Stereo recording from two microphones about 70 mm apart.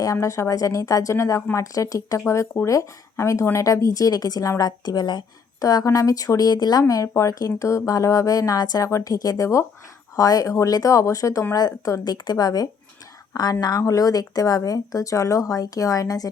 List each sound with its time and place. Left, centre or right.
0.0 s speech: left
1.1 s speech: left
6.8 s speech: left
10.2 s speech: left
12.0 s a woman's voice: left